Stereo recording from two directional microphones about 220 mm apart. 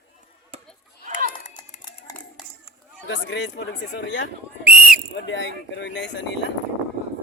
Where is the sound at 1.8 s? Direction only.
20° left (ahead or behind).